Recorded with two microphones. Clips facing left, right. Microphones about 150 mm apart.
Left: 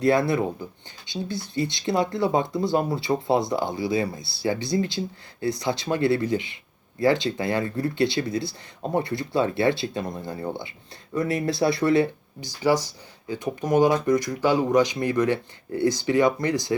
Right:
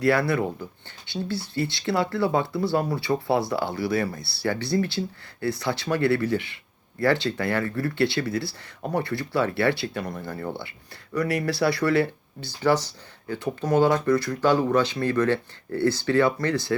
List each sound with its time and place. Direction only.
0.0 s speech: 20° left (ahead or behind)